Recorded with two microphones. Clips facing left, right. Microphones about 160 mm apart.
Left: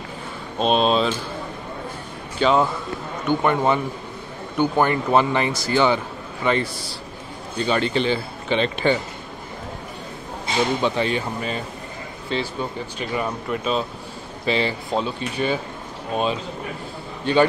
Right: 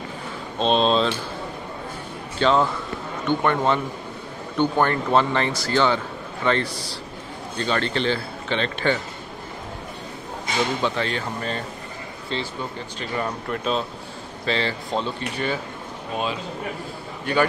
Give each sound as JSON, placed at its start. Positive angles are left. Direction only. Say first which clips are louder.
{"t": 0.6, "sound": "speech", "louder": "left 1 dB", "side_deg": 10}
{"t": 2.3, "sound": "speech", "louder": "left 1 dB", "side_deg": 10}
{"t": 10.8, "sound": "speech", "louder": "left 3 dB", "side_deg": 15}
{"t": 14.4, "sound": "speech", "louder": "left 3 dB", "side_deg": 15}
{"t": 17.2, "sound": "a man's voice", "louder": "left 4 dB", "side_deg": 25}